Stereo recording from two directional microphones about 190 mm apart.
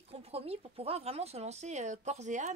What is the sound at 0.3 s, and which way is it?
A woman's voice, 30° right (ahead or behind).